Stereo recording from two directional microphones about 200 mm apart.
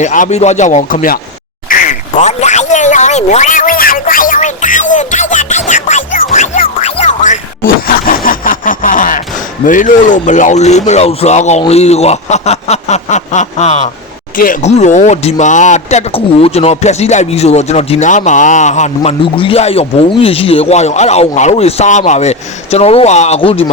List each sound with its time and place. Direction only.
0.0 s speech: 40° left (ahead or behind)
1.6 s a sound: 40° left (ahead or behind)
9.6 s speech: 40° left (ahead or behind)